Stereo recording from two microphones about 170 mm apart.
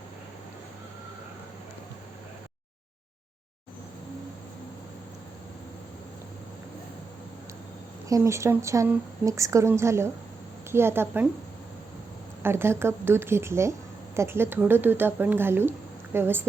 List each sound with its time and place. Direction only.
8.1 s a woman's voice: 15° right (ahead or behind)
12.4 s a woman's voice: 15° right (ahead or behind)